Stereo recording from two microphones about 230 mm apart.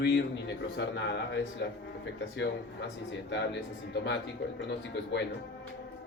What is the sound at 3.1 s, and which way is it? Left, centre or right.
Speech, left.